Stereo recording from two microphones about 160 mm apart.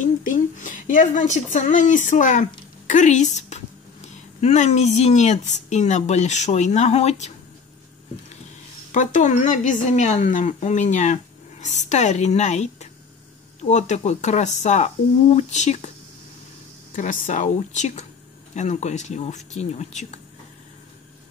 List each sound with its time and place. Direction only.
0.0 s a woman's voice: 55° left (ahead or behind)
8.9 s a woman's voice: 50° left (ahead or behind)
16.9 s a woman's voice: 50° left (ahead or behind)